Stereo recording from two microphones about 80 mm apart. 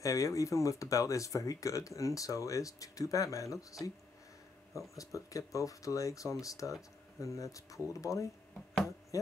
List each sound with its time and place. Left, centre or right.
0.0 s speech: left